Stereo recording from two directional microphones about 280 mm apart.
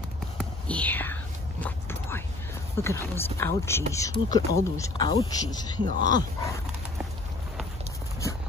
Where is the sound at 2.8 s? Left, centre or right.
Centre.